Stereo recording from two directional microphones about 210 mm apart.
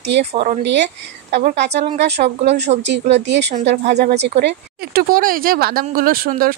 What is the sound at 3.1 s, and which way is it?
Speech, 55° right (ahead or behind).